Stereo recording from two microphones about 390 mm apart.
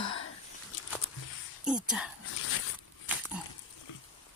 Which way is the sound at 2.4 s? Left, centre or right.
Left.